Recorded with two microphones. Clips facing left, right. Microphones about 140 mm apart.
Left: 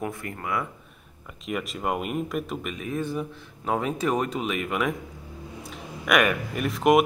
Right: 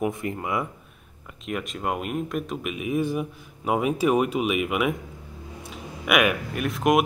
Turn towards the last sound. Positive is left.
turn(degrees=0)  # may be behind; listen again after turning